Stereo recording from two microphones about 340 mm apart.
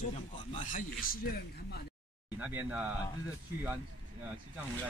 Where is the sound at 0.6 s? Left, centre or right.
Left.